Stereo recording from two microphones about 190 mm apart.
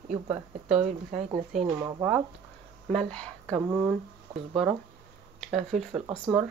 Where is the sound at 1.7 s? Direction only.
15° right (ahead or behind).